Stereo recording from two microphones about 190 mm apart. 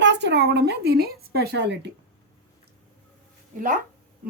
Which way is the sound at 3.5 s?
45° right (ahead or behind).